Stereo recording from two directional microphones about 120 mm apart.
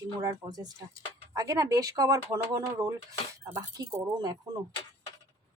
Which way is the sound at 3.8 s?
40° right (ahead or behind).